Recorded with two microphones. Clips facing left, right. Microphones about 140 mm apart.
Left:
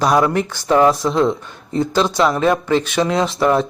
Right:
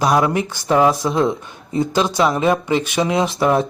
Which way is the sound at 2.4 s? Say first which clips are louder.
Left 1 dB; 15° right (ahead or behind).